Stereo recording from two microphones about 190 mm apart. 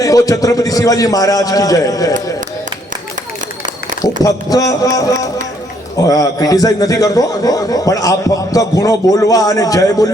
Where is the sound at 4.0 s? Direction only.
20° left (ahead or behind).